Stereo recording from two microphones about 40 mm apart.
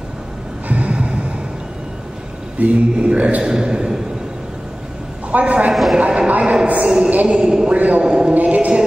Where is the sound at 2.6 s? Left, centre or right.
Right.